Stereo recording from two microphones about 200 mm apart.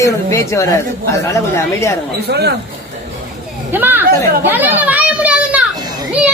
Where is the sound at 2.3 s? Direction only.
55° right (ahead or behind).